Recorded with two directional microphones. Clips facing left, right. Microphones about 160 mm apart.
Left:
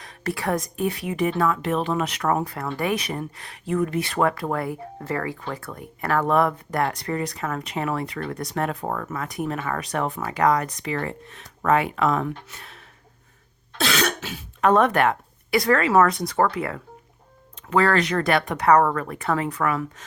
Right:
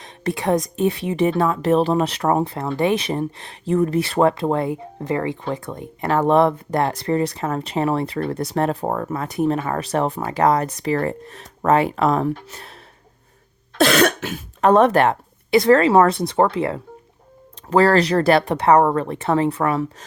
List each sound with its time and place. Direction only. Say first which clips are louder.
0.0 s a sound: right 4 dB; 20° right (ahead or behind)
0.8 s speech: right 5 dB; 25° right (ahead or behind)
13.7 s cough: right 8 dB; 55° right (ahead or behind)
14.6 s speech: right 4 dB; 30° right (ahead or behind)